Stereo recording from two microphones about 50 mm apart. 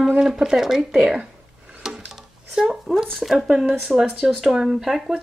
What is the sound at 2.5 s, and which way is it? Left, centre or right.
Speech, centre.